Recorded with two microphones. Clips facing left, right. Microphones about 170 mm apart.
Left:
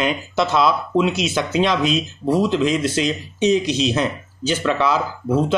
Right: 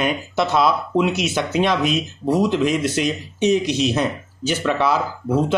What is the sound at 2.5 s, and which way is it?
Speech, 55° right (ahead or behind).